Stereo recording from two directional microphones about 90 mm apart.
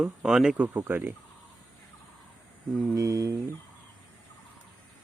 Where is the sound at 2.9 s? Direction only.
40° right (ahead or behind).